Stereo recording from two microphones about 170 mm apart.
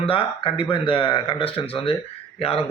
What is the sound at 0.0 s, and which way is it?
A man's voice, 30° left (ahead or behind).